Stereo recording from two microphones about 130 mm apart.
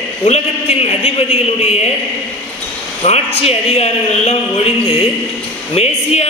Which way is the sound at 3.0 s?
55° left (ahead or behind).